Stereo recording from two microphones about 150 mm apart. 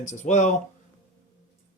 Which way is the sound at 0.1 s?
55° left (ahead or behind).